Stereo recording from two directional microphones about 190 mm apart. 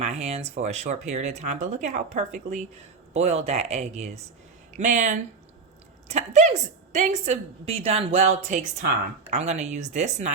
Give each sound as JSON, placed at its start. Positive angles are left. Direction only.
{"t": 0.0, "sound": "speech", "side_deg": -35}